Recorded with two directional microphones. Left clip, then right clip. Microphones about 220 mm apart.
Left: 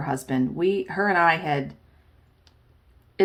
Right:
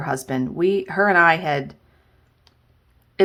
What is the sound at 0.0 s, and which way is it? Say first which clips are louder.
Speech: right 2 dB; 25° right (ahead or behind).